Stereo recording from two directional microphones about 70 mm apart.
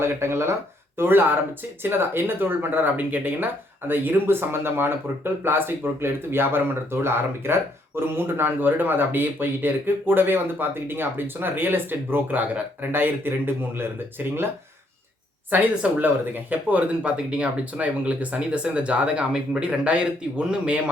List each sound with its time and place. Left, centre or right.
0.0 s speech: right
15.4 s speech: right